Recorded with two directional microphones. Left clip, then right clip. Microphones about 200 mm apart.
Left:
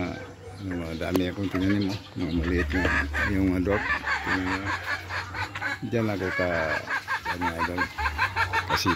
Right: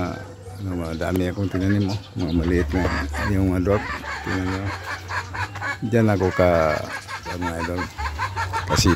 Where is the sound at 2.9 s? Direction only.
35° left (ahead or behind).